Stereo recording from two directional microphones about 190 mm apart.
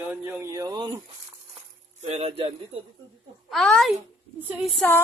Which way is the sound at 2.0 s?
35° right (ahead or behind).